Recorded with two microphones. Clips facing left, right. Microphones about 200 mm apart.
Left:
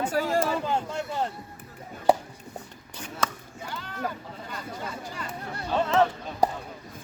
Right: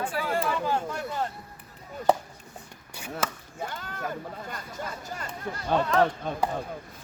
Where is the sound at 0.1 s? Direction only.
45° left (ahead or behind).